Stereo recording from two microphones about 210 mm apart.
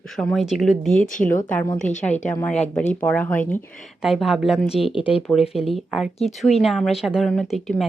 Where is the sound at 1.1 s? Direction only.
40° left (ahead or behind).